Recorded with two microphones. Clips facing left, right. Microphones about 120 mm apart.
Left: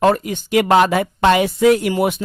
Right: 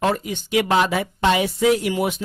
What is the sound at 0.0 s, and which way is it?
Speech, 55° left (ahead or behind).